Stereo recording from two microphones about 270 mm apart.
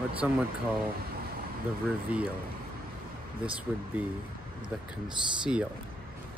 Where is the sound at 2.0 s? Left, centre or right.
Centre.